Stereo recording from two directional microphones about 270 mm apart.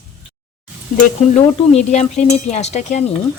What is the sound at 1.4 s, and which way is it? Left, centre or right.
A woman's voice, left.